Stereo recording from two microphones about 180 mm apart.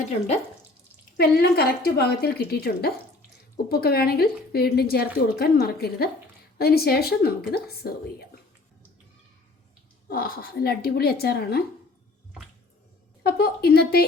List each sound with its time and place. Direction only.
1.1 s a woman's voice: 60° left (ahead or behind)
10.1 s a woman's voice: 55° left (ahead or behind)
13.2 s a woman's voice: 60° left (ahead or behind)